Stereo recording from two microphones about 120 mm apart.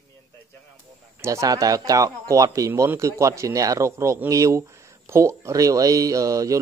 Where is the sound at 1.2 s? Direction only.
30° right (ahead or behind).